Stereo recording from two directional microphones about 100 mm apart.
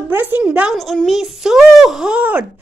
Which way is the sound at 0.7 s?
Centre (ahead or behind).